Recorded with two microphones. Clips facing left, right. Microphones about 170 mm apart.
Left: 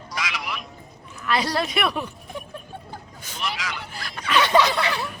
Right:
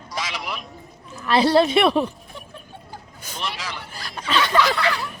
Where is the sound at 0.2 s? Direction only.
35° right (ahead or behind).